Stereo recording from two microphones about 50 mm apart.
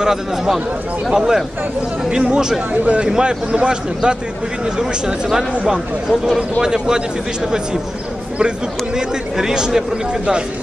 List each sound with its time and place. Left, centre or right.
0.0 s a man's voice: centre
6.6 s a man's voice: centre
8.9 s a man's voice: centre